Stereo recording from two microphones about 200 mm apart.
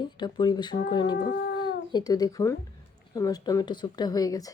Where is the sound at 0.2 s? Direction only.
20° left (ahead or behind).